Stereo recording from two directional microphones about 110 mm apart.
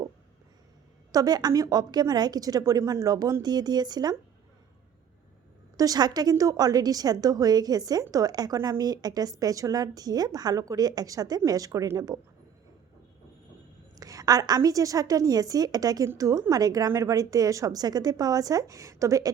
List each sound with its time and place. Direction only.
1.1 s a woman's voice: 35° right (ahead or behind)
5.7 s a woman's voice: 35° right (ahead or behind)
14.0 s a woman's voice: 35° right (ahead or behind)